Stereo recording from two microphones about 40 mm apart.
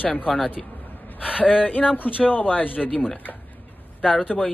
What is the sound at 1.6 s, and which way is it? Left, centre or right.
Speech, left.